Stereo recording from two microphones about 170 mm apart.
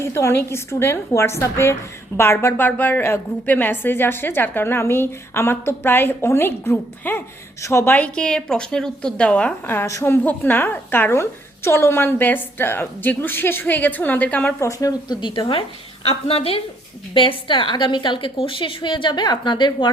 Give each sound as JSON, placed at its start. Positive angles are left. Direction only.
{"t": 0.0, "sound": "a woman's voice", "side_deg": 15}